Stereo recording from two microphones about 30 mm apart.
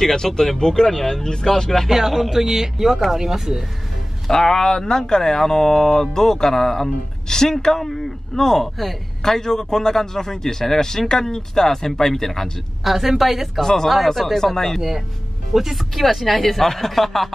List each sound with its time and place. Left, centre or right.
0.1 s a man's voice: centre
1.9 s speech: centre
4.3 s a man's voice: left
12.8 s speech: centre
13.6 s a man's voice: centre
15.5 s a man's voice: centre